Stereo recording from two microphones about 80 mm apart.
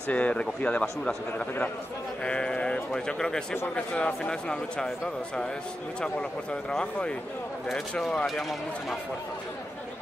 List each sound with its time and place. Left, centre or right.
0.1 s speech: centre
2.2 s speech: centre